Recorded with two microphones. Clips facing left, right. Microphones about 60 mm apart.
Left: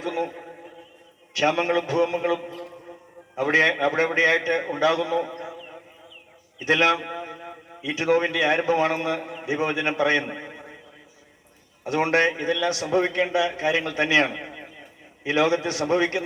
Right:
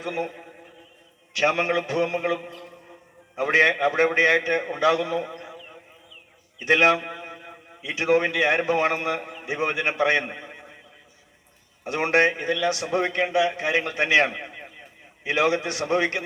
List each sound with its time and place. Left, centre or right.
0.0 s a sound: right
1.4 s a man's voice: right
6.7 s a man's voice: right
11.9 s a man's voice: right